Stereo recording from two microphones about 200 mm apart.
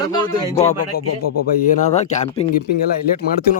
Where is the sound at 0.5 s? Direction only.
35° left (ahead or behind).